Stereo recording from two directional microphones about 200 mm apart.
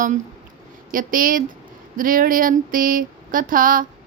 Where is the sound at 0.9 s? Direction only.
45° right (ahead or behind).